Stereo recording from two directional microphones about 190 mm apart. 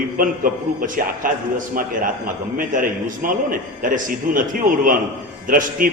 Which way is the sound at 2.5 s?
45° right (ahead or behind).